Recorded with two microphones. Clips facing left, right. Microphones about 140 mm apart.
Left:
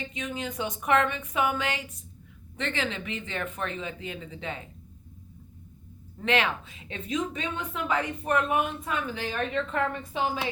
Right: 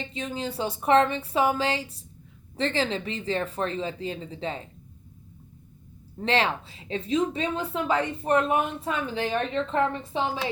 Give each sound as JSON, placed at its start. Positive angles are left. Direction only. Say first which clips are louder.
{"t": 0.0, "sound": "a woman's voice", "louder": "right 2 dB", "side_deg": -30}
{"t": 6.1, "sound": "a woman's voice", "louder": "right 2 dB", "side_deg": -30}